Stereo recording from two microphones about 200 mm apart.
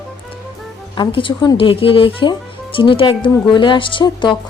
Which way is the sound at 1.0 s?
25° left (ahead or behind).